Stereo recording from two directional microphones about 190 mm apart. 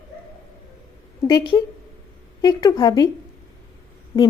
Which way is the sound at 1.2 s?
15° left (ahead or behind).